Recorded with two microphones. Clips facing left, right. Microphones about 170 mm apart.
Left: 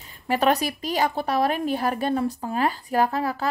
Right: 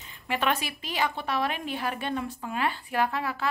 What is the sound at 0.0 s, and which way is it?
A woman's voice, 40° left (ahead or behind).